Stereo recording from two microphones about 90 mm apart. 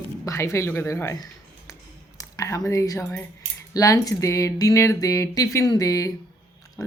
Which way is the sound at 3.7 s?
40° left (ahead or behind).